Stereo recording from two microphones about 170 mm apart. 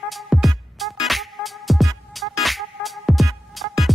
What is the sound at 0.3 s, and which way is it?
Music, centre (ahead or behind).